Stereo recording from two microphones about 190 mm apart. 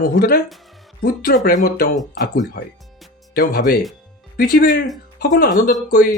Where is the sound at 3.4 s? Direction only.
50° left (ahead or behind).